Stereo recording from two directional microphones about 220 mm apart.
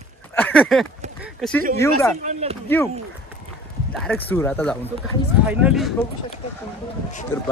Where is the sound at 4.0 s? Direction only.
5° left (ahead or behind).